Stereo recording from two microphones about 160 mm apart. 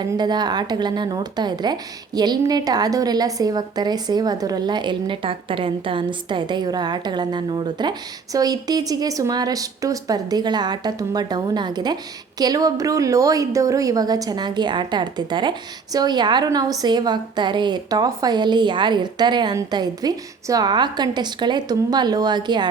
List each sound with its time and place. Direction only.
0.0 s a woman's voice: 25° right (ahead or behind)